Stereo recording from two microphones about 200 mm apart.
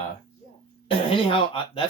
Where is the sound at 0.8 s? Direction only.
25° left (ahead or behind).